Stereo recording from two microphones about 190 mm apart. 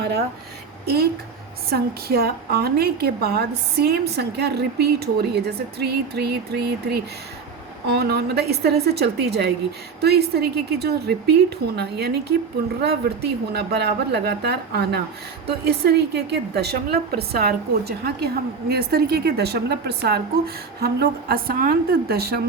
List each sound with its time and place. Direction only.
0.0 s speech: 55° right (ahead or behind)
1.7 s a woman's voice: 55° right (ahead or behind)